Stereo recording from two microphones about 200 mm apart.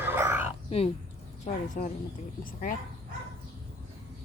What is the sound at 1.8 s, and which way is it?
Speech, 45° left (ahead or behind).